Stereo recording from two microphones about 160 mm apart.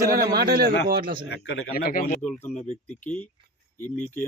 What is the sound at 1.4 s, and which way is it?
Speech, 70° left (ahead or behind).